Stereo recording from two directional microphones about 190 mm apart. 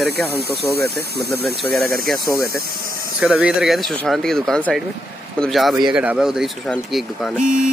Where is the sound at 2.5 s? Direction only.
50° right (ahead or behind).